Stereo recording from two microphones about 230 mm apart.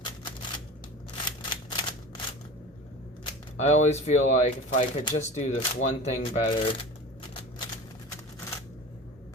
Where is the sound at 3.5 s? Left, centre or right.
Left.